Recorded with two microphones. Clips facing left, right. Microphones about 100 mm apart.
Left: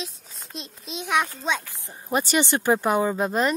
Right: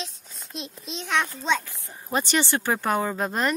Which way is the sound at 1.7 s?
20° left (ahead or behind).